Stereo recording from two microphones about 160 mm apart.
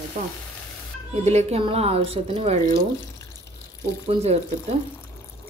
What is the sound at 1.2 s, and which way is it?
A woman's voice, 40° right (ahead or behind).